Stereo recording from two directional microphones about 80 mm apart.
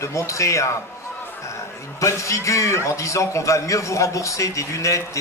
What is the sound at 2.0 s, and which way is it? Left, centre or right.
A man's voice, left.